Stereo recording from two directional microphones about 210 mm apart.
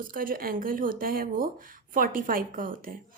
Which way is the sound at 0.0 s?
40° right (ahead or behind).